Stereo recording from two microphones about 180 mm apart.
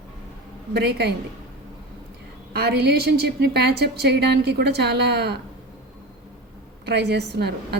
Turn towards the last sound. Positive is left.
turn(degrees=-65)  # may be behind; listen again after turning